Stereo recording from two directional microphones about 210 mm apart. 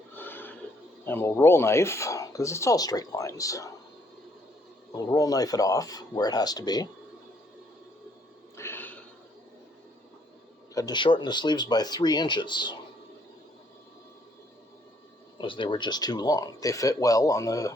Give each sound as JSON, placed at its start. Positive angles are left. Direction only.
{"t": 0.2, "sound": "a sound", "side_deg": 10}
{"t": 1.0, "sound": "speech", "side_deg": 10}
{"t": 5.0, "sound": "speech", "side_deg": 15}
{"t": 8.5, "sound": "a sound", "side_deg": 10}
{"t": 10.8, "sound": "speech", "side_deg": 20}
{"t": 15.4, "sound": "speech", "side_deg": 25}